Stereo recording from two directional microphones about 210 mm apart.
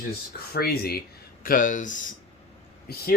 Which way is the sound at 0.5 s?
45° left (ahead or behind).